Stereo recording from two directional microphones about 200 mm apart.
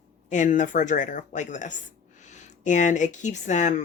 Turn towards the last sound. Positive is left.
turn(degrees=35)  # may be behind; listen again after turning